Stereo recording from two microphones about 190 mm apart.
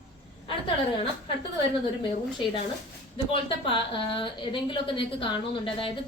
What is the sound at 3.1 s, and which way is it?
Speech, 25° left (ahead or behind).